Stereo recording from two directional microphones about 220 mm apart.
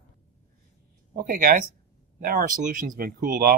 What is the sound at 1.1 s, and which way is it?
Speech, 40° right (ahead or behind).